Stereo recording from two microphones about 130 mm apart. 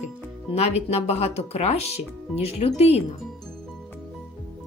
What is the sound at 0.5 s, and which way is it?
Speech, 55° left (ahead or behind).